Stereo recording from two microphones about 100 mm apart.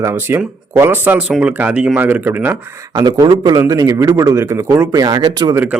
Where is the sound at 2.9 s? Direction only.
45° right (ahead or behind); by 4.9 s 25° right (ahead or behind).